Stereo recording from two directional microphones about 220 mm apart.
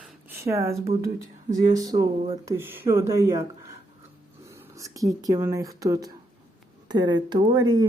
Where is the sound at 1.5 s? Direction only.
15° right (ahead or behind).